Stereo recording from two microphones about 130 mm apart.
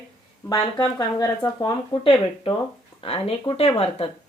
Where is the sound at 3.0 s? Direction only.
45° left (ahead or behind).